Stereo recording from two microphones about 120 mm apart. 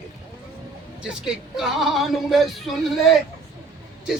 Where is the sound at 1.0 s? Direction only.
5° right (ahead or behind).